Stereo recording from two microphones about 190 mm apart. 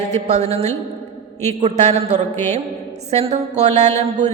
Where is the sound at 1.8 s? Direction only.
35° right (ahead or behind).